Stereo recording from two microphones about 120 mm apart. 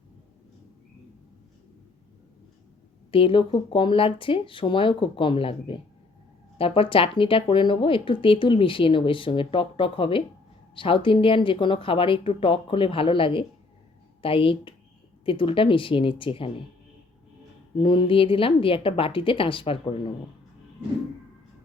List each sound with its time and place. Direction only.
3.1 s speech: 45° left (ahead or behind)
17.7 s speech: 45° left (ahead or behind)